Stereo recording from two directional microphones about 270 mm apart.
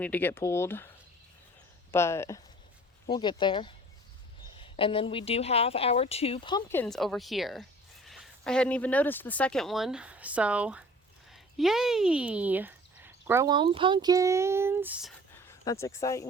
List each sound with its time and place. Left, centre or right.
0.0 s speech: centre
1.9 s speech: centre
15.6 s speech: centre